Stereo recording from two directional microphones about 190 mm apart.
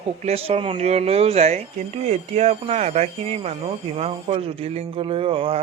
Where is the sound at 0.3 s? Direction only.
30° right (ahead or behind).